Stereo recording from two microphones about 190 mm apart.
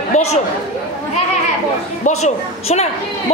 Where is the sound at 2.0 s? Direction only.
35° left (ahead or behind).